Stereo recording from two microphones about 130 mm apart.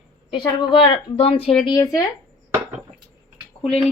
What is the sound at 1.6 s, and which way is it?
Speech, 30° left (ahead or behind).